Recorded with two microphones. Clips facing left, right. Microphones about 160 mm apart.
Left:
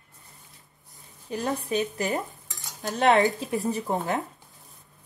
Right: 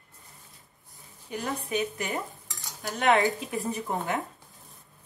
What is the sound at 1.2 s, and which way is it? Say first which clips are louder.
A woman's voice: left 4 dB; 35° left (ahead or behind).